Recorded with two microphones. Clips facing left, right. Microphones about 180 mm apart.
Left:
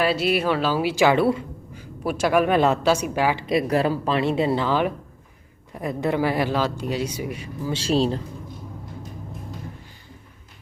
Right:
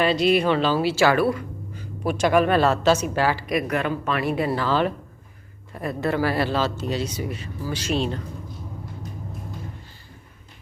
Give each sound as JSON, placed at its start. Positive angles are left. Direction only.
{"t": 0.0, "sound": "speech", "side_deg": 5}
{"t": 1.7, "sound": "a woman's voice", "side_deg": 5}
{"t": 3.4, "sound": "speech", "side_deg": 25}
{"t": 7.7, "sound": "speech", "side_deg": 30}